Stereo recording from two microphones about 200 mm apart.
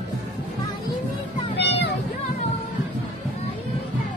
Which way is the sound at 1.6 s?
60° left (ahead or behind).